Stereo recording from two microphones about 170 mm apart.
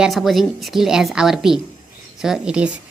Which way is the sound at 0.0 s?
Centre (ahead or behind).